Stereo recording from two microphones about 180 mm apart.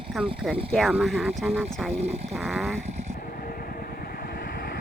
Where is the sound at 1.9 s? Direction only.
35° right (ahead or behind).